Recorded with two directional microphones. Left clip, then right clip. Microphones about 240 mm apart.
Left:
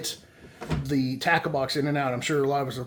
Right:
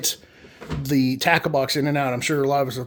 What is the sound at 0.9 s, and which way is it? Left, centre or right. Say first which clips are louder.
Speech: right 5 dB; right.